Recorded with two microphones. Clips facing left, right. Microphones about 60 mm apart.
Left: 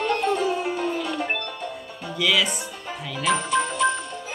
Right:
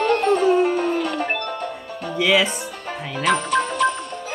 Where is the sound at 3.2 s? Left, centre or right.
Right.